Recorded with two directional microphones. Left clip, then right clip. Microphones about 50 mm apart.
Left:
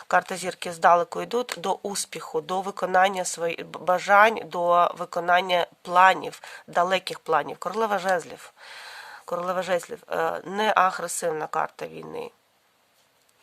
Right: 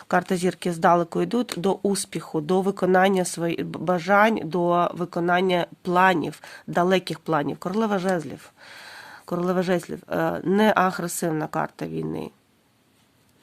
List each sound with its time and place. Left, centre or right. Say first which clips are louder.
0.1 s speech: right 1 dB; centre
3.8 s speech: left 1 dB; left
7.9 s speech: left 2 dB; left
8.6 s speech: left 3 dB; centre